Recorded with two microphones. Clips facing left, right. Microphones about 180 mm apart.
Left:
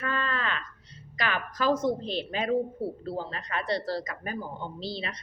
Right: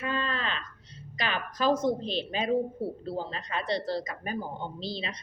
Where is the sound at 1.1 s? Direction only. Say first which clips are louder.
Left 1 dB; 20° right (ahead or behind).